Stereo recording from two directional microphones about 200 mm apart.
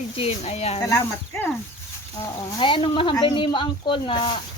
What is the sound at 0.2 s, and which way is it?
Speech, 30° left (ahead or behind).